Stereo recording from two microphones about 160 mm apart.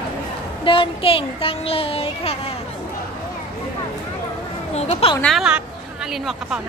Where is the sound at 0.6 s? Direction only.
35° left (ahead or behind).